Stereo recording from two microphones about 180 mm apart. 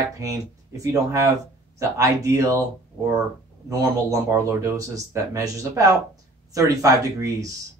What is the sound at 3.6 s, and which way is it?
A man's voice, 15° right (ahead or behind).